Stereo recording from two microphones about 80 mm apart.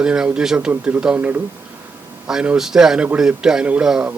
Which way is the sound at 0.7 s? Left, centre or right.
Right.